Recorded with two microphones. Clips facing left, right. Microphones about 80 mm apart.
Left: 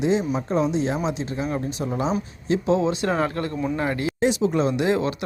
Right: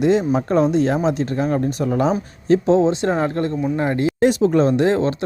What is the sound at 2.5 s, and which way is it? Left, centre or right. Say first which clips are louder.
Speech: right 6 dB; right.